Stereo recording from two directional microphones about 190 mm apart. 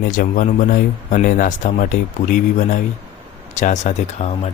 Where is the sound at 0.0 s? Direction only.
45° left (ahead or behind).